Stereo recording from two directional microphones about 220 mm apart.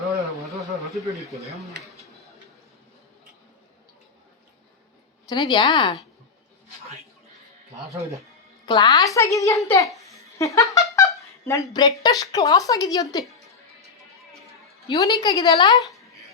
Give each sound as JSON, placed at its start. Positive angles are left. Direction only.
{"t": 0.7, "sound": "speech", "side_deg": 0}
{"t": 5.3, "sound": "a woman's voice", "side_deg": 20}
{"t": 8.6, "sound": "a woman's voice", "side_deg": 20}
{"t": 14.8, "sound": "a woman's voice", "side_deg": 15}